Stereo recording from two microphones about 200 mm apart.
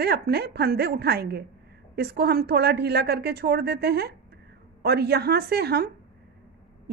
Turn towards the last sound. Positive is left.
turn(degrees=-50)  # may be behind; listen again after turning